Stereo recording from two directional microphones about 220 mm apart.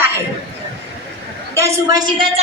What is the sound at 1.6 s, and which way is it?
Speech, 15° right (ahead or behind).